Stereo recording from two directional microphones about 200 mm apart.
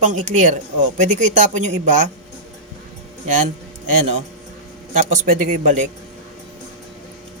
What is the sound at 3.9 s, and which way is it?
Speech, 35° right (ahead or behind).